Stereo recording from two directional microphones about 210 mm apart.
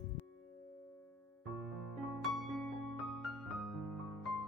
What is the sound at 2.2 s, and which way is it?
Music, centre (ahead or behind).